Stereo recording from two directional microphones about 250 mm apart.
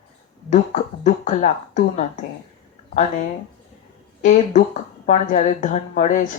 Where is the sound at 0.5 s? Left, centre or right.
Left.